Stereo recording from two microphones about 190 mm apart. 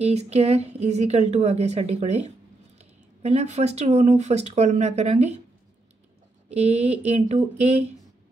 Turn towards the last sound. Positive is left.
turn(degrees=-35)  # may be behind; listen again after turning